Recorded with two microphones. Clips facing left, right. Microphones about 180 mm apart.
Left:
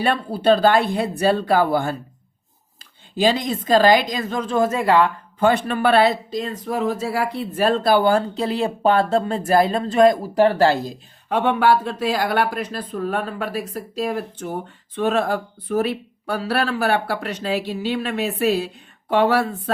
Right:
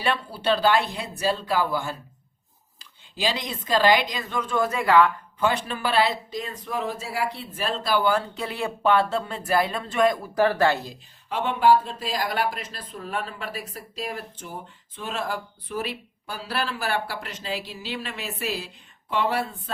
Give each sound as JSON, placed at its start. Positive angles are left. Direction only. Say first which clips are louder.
{"t": 0.0, "sound": "speech", "louder": "left 7 dB", "side_deg": 50}
{"t": 3.2, "sound": "a woman's voice", "louder": "left 9 dB", "side_deg": 50}
{"t": 5.4, "sound": "speech", "louder": "left 7 dB", "side_deg": 55}
{"t": 6.3, "sound": "a woman's voice", "louder": "left 6 dB", "side_deg": 40}
{"t": 7.5, "sound": "speech", "louder": "left 10 dB", "side_deg": 60}
{"t": 10.8, "sound": "speech", "louder": "left 7 dB", "side_deg": 60}
{"t": 14.1, "sound": "speech", "louder": "left 9 dB", "side_deg": 60}